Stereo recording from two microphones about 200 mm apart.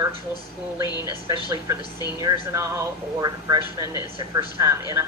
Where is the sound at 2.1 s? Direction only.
20° right (ahead or behind).